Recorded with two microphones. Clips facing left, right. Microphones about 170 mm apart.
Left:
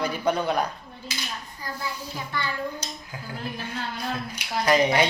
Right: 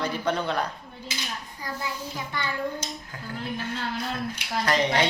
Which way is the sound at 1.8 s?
20° right (ahead or behind).